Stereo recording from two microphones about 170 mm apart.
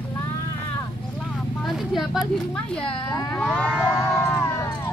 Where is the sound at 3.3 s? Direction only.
5° left (ahead or behind).